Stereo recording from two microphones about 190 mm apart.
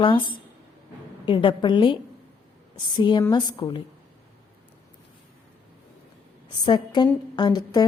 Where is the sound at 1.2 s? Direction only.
25° left (ahead or behind).